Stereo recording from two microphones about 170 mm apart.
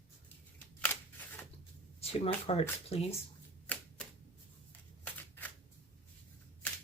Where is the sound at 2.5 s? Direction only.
35° left (ahead or behind).